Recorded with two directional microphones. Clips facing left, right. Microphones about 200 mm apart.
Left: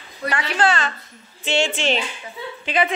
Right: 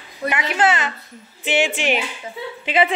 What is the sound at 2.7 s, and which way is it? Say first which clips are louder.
Speech: right 2 dB; 25° right (ahead or behind).